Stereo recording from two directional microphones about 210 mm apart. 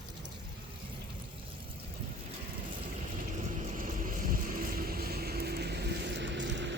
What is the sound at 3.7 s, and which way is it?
Vehicle, 40° right (ahead or behind).